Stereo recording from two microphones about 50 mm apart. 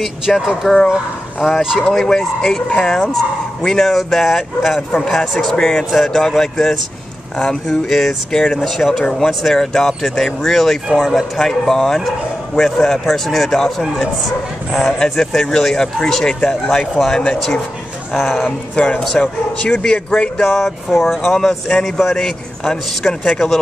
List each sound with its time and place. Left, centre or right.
0.3 s speech: centre
1.4 s speech: centre
2.0 s speech: centre
5.9 s speech: centre
18.1 s speech: centre
18.8 s speech: left
19.0 s speech: centre
19.6 s speech: centre
20.3 s speech: centre
20.6 s speech: centre